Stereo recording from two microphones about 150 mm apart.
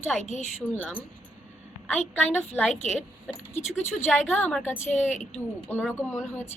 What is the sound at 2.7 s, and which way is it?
A woman's voice, 50° left (ahead or behind).